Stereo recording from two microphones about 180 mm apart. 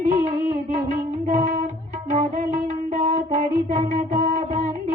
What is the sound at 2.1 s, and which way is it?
Music, 40° right (ahead or behind).